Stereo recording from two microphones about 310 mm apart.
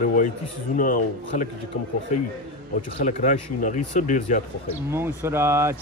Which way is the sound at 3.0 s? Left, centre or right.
Left.